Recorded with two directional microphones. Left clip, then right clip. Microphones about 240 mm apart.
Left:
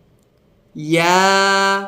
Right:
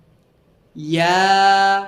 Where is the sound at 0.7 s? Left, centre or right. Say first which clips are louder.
Left 2 dB; centre.